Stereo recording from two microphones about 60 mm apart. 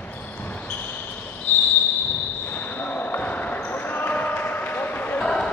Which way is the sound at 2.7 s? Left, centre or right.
Left.